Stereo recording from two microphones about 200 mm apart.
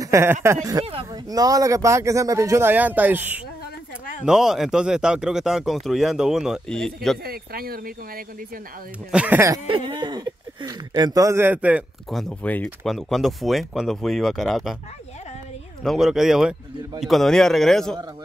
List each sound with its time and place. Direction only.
0.0 s speech: 15° right (ahead or behind)
4.3 s speech: centre (ahead or behind)
7.2 s speech: 50° right (ahead or behind)
9.1 s speech: 5° right (ahead or behind)
9.7 s speech: 25° right (ahead or behind); by 14.8 s centre (ahead or behind)
15.8 s speech: centre (ahead or behind)